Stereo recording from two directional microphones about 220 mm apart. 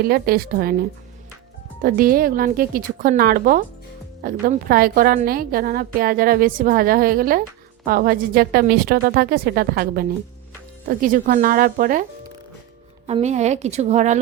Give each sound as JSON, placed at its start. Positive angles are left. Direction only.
{"t": 0.0, "sound": "a woman's voice", "side_deg": -45}
{"t": 1.8, "sound": "a woman's voice", "side_deg": -40}
{"t": 13.1, "sound": "a woman's voice", "side_deg": -30}